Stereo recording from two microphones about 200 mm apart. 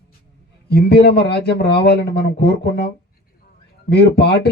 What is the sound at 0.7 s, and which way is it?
Speech, 50° left (ahead or behind).